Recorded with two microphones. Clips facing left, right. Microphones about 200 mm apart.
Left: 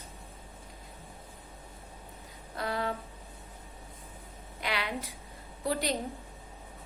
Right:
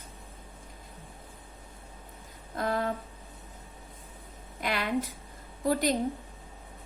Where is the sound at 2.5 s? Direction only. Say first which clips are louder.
Right 3 dB; 50° right (ahead or behind).